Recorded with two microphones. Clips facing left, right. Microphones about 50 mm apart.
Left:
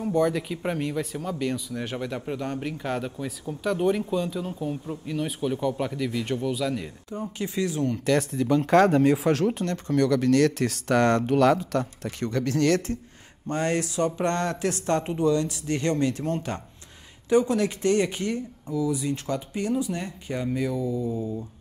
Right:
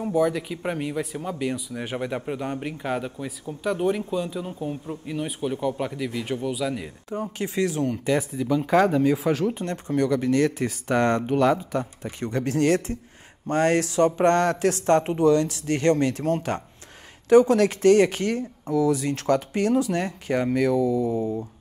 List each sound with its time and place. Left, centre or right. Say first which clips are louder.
0.1 s speech: right 1 dB; centre
7.2 s speech: right 3 dB; right
8.0 s speech: left 1 dB; centre
9.7 s speech: even; centre
12.3 s speech: right 1 dB; right
13.5 s speech: right 5 dB; right
15.2 s speech: right 2 dB; right